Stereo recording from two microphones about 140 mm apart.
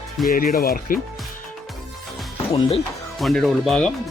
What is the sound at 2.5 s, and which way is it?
Speech, 45° left (ahead or behind).